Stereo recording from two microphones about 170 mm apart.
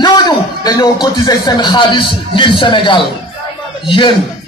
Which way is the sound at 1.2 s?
25° left (ahead or behind).